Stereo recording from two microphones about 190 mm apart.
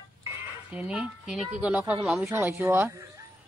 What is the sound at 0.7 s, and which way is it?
Speech, 5° right (ahead or behind).